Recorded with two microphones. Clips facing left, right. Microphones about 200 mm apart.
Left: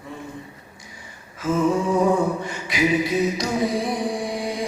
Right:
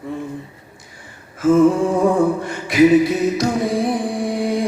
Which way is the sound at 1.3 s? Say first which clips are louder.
Right 8 dB; 50° right (ahead or behind).